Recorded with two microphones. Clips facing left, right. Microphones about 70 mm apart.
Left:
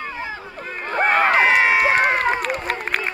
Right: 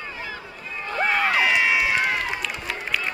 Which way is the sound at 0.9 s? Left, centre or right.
Left.